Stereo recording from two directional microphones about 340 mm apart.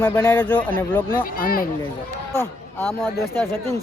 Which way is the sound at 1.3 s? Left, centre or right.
Left.